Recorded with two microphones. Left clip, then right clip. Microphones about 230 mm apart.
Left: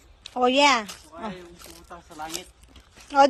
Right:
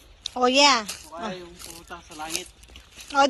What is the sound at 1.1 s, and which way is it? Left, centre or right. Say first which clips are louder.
Speech: right 2 dB; right.